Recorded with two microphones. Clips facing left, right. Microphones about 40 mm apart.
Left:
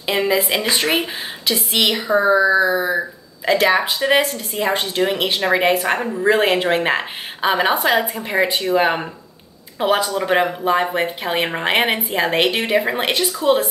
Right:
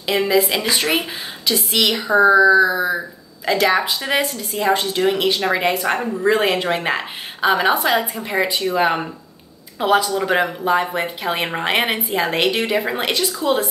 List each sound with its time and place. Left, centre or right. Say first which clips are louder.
0.1 s speech: right 1 dB; centre